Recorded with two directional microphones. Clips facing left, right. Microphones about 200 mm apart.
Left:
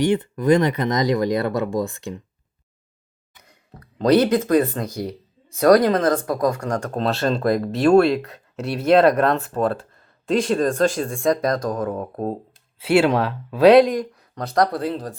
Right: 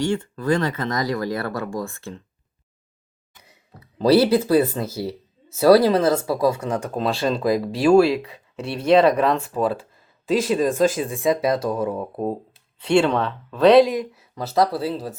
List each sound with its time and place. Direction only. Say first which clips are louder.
0.0 s speech: left 4 dB; 20° left (ahead or behind)
3.4 s speech: left 3 dB; 5° right (ahead or behind)
12.8 s speech: left 1 dB; 5° left (ahead or behind)